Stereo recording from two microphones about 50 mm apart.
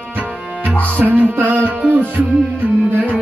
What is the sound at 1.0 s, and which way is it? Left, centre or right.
Music, right.